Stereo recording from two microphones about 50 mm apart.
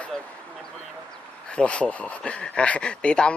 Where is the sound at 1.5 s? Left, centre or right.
Left.